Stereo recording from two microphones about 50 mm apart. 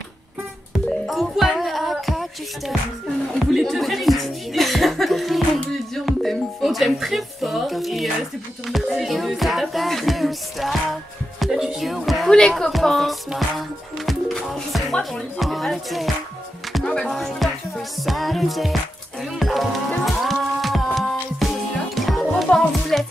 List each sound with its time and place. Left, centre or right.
1.0 s music: centre
12.3 s a woman's voice: centre
13.3 s music: centre
16.8 s speech: centre
17.1 s music: centre